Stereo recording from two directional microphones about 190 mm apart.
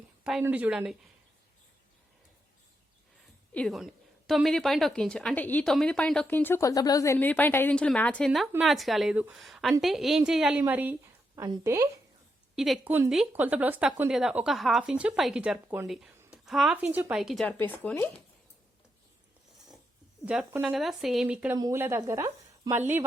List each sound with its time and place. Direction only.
0.4 s a woman's voice: 10° right (ahead or behind)
3.5 s a woman's voice: 5° left (ahead or behind); by 11.9 s 15° right (ahead or behind)
12.5 s a woman's voice: centre (ahead or behind)
20.2 s a woman's voice: 5° right (ahead or behind)